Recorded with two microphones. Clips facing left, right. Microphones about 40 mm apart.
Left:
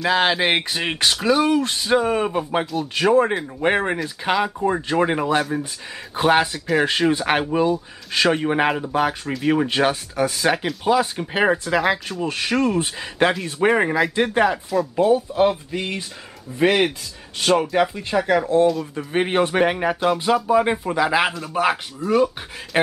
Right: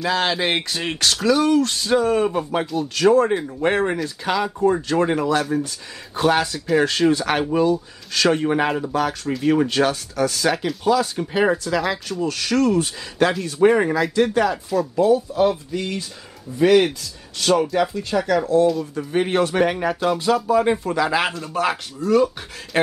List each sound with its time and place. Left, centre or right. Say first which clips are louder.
0.0 s speech: left 2 dB; left
2.6 s speech: right 1 dB; centre
2.9 s speech: right 1 dB; left
3.3 s speech: right 2 dB; centre
3.6 s speech: left 1 dB; centre